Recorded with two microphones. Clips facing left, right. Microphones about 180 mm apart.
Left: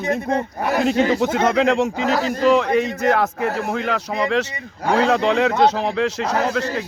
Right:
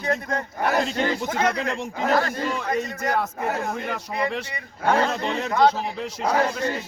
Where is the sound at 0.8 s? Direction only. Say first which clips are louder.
Left 8 dB; 75° left (ahead or behind).